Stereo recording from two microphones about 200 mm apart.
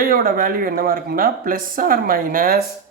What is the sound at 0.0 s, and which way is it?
Speech, 45° right (ahead or behind).